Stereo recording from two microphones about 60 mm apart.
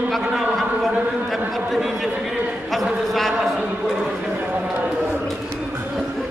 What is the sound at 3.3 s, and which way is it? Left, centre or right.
Speech, centre.